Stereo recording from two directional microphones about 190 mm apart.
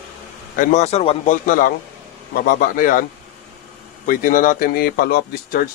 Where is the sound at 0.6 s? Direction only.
40° left (ahead or behind).